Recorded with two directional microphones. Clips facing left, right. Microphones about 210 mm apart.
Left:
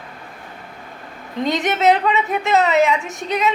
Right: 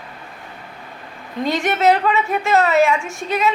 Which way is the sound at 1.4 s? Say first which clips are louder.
Even; 20° left (ahead or behind).